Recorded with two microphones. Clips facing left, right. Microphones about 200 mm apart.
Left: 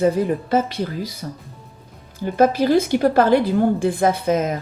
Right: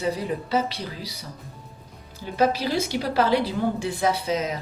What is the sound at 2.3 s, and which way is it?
A woman's voice, 50° left (ahead or behind).